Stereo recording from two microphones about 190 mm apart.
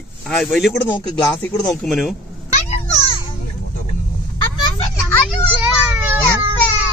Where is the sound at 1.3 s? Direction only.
15° left (ahead or behind).